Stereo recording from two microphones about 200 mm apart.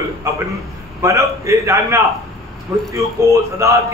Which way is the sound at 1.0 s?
15° right (ahead or behind).